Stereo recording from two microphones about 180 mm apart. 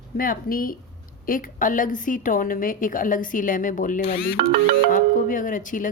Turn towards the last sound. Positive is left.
turn(degrees=45)  # may be behind; listen again after turning